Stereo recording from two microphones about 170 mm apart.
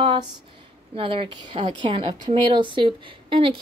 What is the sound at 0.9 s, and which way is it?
Speech, 30° right (ahead or behind).